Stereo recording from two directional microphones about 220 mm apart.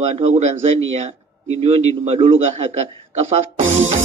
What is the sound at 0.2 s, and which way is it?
Music, 30° right (ahead or behind).